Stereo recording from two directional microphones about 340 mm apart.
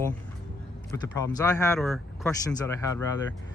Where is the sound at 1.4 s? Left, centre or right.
Centre.